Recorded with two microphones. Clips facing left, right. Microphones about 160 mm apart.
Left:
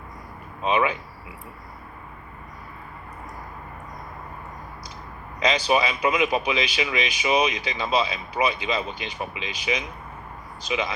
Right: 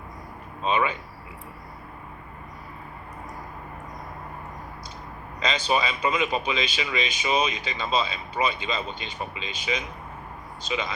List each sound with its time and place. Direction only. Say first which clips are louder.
0.6 s speech: left 2 dB; 15° left (ahead or behind)
5.5 s speech: left 3 dB; 15° left (ahead or behind)